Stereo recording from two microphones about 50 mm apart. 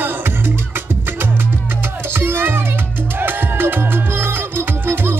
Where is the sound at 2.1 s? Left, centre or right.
Right.